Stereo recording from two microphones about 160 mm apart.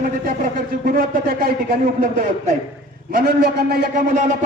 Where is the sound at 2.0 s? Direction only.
60° right (ahead or behind).